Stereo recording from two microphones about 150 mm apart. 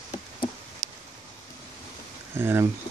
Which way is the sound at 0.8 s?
40° right (ahead or behind).